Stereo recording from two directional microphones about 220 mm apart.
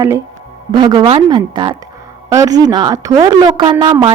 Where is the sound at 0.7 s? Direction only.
20° right (ahead or behind).